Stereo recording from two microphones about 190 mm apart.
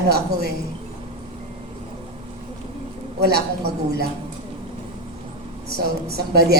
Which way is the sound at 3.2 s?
55° right (ahead or behind).